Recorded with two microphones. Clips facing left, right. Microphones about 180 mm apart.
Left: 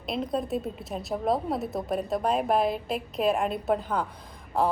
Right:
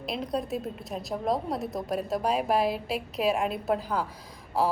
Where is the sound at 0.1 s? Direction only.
Centre (ahead or behind).